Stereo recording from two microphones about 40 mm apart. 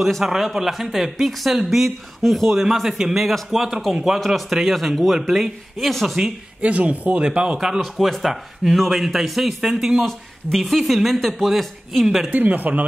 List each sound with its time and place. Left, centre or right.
0.2 s speech: centre
2.6 s speech: centre
6.0 s speech: centre
6.6 s speech: right
7.5 s speech: centre
7.8 s speech: centre
12.4 s speech: right